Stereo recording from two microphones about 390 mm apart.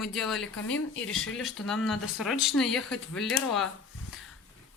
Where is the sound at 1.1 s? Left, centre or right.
Centre.